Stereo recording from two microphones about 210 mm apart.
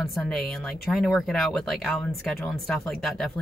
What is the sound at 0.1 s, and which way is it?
Speech, centre (ahead or behind).